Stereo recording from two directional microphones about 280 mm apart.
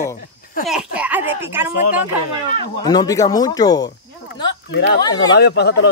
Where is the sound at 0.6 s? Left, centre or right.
Centre.